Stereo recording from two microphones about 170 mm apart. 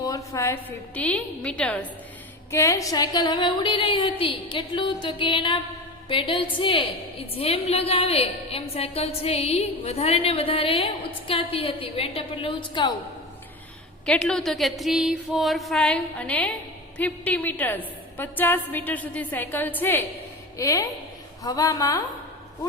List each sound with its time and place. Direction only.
0.0 s a woman's voice: 20° left (ahead or behind)
2.5 s a woman's voice: 15° left (ahead or behind)
14.0 s a woman's voice: 5° left (ahead or behind)